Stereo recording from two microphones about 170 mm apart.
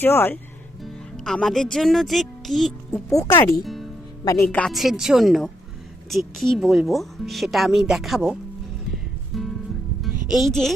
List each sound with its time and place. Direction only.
0.0 s speech: 10° left (ahead or behind)
0.8 s speech: centre (ahead or behind)
2.9 s speech: 15° left (ahead or behind)
3.6 s music: centre (ahead or behind)
4.3 s speech: 15° left (ahead or behind)
8.9 s music: centre (ahead or behind)
10.2 s speech: centre (ahead or behind)